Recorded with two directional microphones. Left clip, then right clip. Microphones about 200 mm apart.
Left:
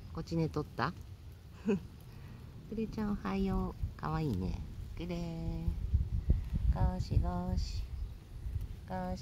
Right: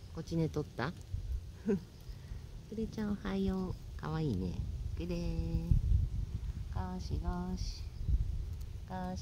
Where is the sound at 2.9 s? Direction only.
10° left (ahead or behind).